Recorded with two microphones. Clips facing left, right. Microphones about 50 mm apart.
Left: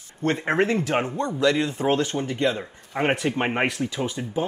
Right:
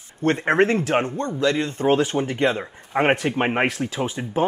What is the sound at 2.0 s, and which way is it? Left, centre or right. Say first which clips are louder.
Speech: right 4 dB; centre.